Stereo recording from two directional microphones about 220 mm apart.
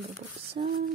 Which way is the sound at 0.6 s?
25° right (ahead or behind).